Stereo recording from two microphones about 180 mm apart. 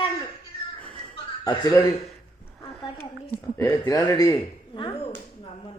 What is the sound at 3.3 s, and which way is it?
Speech, 15° left (ahead or behind).